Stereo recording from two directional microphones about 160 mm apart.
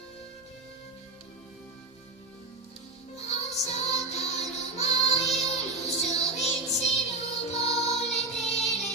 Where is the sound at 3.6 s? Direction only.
40° left (ahead or behind).